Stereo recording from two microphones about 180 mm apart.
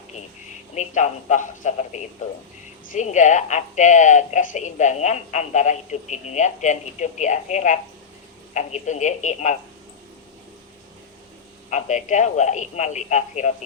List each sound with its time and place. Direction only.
0.7 s a woman's voice: 40° left (ahead or behind)
11.7 s a woman's voice: 40° left (ahead or behind)